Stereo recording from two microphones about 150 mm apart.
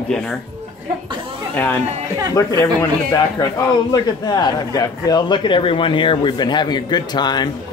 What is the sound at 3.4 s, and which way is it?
A man's voice, 25° left (ahead or behind).